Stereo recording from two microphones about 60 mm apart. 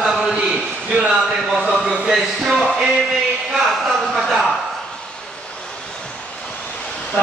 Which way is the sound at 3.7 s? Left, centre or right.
Centre.